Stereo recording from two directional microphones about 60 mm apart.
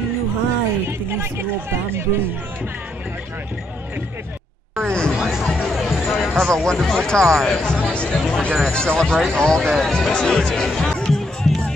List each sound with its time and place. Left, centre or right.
0.8 s speech: right
4.8 s a sound: centre
5.1 s music: centre
5.4 s music: centre
5.9 s a sound: centre
6.2 s music: centre
6.5 s speech: centre
10.1 s music: centre